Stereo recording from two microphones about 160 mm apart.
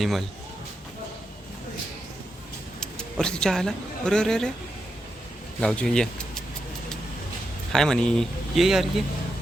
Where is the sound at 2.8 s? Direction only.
5° left (ahead or behind).